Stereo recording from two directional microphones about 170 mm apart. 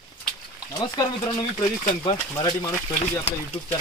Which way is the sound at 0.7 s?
20° left (ahead or behind).